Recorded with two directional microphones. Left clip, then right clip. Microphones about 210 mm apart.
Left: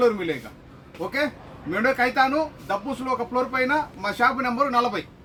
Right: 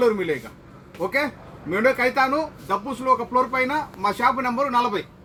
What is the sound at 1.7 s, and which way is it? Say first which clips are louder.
Speech: right 2 dB; 15° left (ahead or behind).